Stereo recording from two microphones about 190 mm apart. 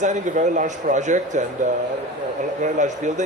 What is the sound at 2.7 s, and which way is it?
Speech, 40° right (ahead or behind).